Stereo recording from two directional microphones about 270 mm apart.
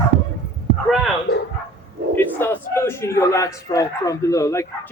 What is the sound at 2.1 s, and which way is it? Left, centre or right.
A man's voice, centre.